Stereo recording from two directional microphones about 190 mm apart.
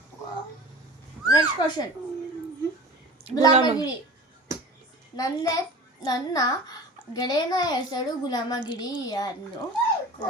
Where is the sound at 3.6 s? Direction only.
20° left (ahead or behind).